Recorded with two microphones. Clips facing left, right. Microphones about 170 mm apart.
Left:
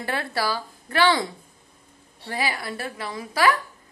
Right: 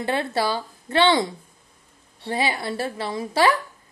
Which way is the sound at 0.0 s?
20° right (ahead or behind).